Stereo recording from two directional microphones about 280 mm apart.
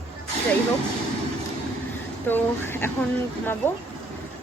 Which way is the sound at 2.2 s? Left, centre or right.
Centre.